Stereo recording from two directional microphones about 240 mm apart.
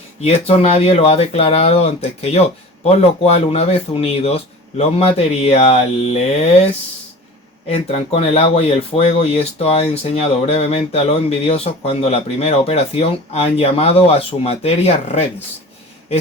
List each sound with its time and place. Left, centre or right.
0.2 s speech: left
7.7 s speech: left